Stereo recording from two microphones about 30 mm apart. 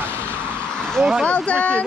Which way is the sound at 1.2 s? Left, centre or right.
Left.